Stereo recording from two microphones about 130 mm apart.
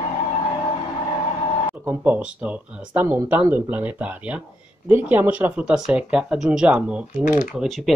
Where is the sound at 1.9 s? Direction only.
10° right (ahead or behind).